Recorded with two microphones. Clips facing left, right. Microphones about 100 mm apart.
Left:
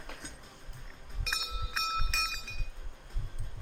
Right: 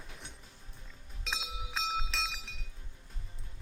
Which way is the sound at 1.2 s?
Centre (ahead or behind).